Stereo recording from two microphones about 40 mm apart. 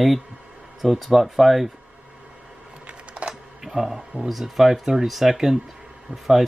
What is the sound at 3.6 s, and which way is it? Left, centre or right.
Music, centre.